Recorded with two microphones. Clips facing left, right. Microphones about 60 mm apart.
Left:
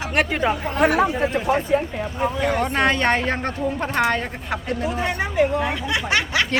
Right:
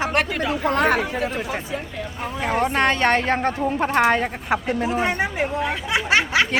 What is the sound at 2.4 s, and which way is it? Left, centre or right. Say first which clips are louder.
Speech: right 2 dB; centre.